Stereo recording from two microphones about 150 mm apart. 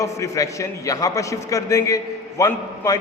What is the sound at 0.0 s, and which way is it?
A man's voice, 20° left (ahead or behind).